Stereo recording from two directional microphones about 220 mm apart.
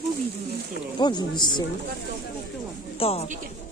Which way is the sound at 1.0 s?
20° left (ahead or behind).